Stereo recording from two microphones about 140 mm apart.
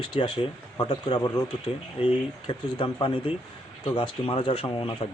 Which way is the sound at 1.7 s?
40° left (ahead or behind).